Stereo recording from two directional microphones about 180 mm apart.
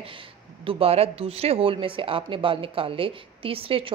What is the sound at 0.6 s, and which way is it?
Speech, 30° right (ahead or behind).